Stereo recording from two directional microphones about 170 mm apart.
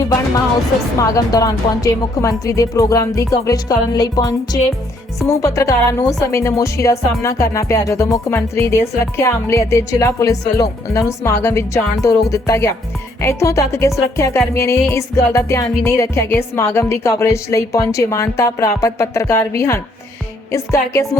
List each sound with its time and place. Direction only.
0.9 s speech: 20° left (ahead or behind)